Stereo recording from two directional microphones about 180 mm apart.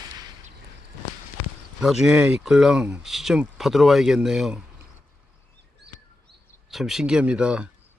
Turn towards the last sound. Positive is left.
turn(degrees=-5)  # may be behind; listen again after turning